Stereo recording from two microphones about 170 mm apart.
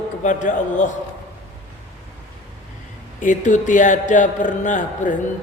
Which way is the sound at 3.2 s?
45° left (ahead or behind).